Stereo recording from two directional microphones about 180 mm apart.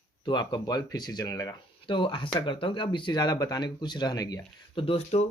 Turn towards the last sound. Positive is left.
turn(degrees=35)  # may be behind; listen again after turning